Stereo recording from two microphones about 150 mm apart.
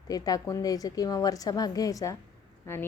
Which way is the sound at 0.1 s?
25° left (ahead or behind).